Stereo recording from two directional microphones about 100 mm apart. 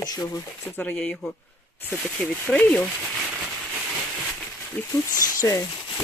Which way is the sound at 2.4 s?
15° left (ahead or behind).